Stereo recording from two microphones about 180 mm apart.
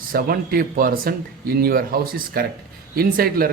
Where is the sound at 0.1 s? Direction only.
55° right (ahead or behind).